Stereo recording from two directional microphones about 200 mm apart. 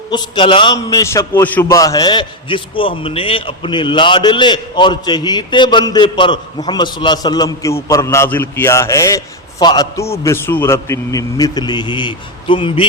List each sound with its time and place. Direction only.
0.1 s a man's voice: 25° left (ahead or behind)